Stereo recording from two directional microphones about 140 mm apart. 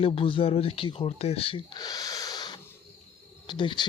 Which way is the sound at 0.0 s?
40° left (ahead or behind).